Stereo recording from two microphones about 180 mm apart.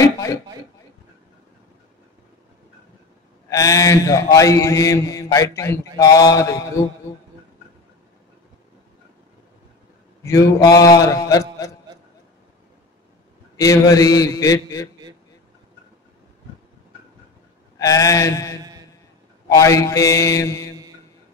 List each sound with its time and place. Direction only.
0.0 s a sound: 15° left (ahead or behind)
3.4 s mantra: 20° left (ahead or behind)
10.2 s a man's voice: 15° left (ahead or behind)
13.6 s a man's voice: 20° left (ahead or behind)
17.7 s a man's voice: 20° left (ahead or behind)
19.5 s mantra: 15° left (ahead or behind)